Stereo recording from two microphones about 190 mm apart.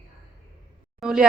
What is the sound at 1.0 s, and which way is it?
Speech, 5° right (ahead or behind).